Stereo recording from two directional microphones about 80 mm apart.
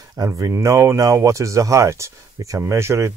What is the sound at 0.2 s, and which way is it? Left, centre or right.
Speech, right.